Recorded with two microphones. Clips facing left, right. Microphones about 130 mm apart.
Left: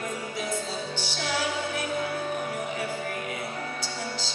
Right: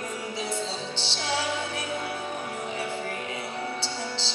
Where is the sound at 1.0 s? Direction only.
25° right (ahead or behind).